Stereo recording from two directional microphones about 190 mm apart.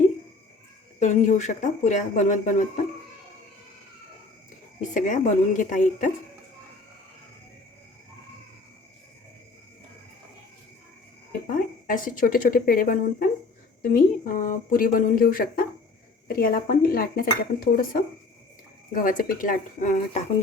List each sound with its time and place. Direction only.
0.9 s speech: 40° left (ahead or behind)
4.8 s speech: 40° left (ahead or behind)
11.4 s speech: 45° left (ahead or behind)